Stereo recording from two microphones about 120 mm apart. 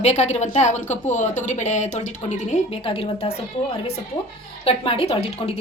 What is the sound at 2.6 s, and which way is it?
Speech, 50° left (ahead or behind).